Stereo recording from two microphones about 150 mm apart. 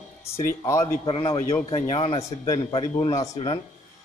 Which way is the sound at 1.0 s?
35° left (ahead or behind).